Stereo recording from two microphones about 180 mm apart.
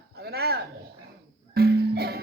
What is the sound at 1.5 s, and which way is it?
Music, 60° right (ahead or behind).